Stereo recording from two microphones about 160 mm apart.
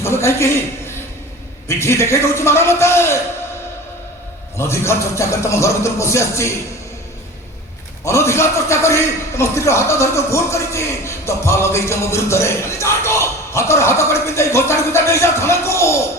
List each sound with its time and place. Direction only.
0.0 s a man's voice: 15° left (ahead or behind)
1.6 s a man's voice: 15° left (ahead or behind)
4.5 s a man's voice: 15° left (ahead or behind)
8.0 s a man's voice: 15° left (ahead or behind)